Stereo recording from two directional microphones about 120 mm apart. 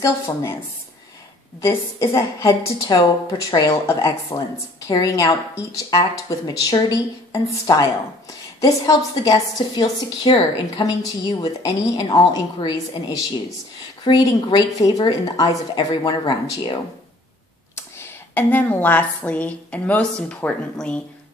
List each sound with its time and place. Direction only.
0.0 s a woman's voice: 20° left (ahead or behind)
1.6 s a woman's voice: 25° left (ahead or behind); by 10.4 s 40° left (ahead or behind)
10.8 s a woman's voice: 30° left (ahead or behind)
14.0 s a woman's voice: 35° left (ahead or behind)
17.7 s a woman's voice: 20° left (ahead or behind)